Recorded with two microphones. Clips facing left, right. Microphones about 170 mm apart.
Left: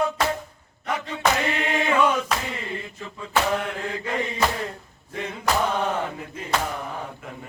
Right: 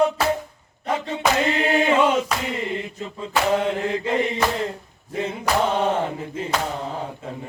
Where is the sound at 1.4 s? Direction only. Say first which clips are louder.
Right 5 dB; 25° right (ahead or behind).